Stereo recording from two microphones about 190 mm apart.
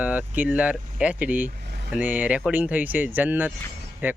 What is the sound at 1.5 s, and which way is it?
Vehicle, 60° right (ahead or behind).